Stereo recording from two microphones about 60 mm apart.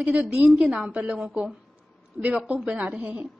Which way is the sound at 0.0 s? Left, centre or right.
Right.